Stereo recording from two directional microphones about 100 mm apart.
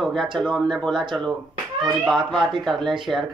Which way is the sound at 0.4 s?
5° left (ahead or behind).